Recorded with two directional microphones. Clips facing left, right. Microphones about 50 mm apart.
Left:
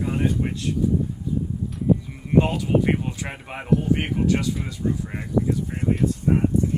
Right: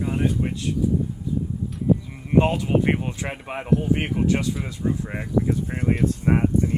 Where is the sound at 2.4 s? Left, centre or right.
Right.